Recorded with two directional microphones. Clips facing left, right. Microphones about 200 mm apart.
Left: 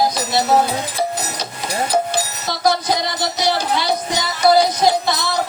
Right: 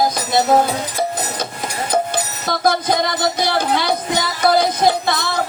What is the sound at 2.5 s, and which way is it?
Music, 50° right (ahead or behind).